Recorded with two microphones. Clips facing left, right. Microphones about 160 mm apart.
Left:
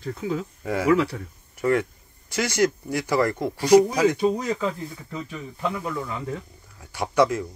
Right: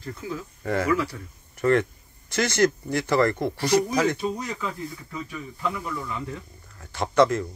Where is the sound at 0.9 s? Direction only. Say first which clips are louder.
Left 5 dB; 65° left (ahead or behind).